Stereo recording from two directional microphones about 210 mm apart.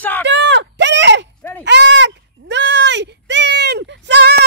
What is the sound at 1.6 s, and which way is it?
Sheep, 55° right (ahead or behind).